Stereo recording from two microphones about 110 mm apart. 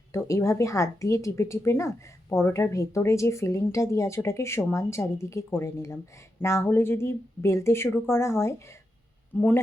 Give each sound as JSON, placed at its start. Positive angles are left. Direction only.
{"t": 0.1, "sound": "speech", "side_deg": 25}